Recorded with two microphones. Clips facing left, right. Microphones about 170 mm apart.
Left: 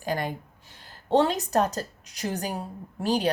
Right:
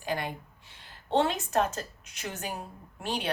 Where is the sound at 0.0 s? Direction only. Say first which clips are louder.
Left 4 dB; 40° left (ahead or behind).